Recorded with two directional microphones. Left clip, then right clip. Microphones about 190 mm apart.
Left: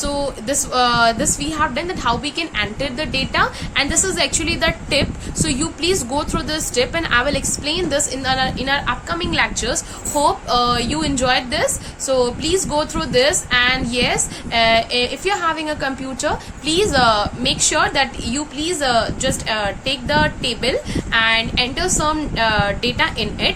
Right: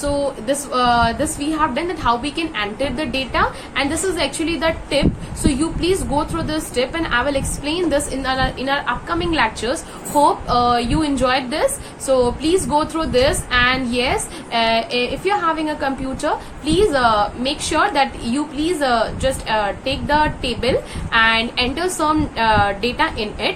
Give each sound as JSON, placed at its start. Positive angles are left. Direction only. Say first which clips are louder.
{"t": 0.0, "sound": "a woman's voice", "louder": "right 2 dB", "side_deg": 25}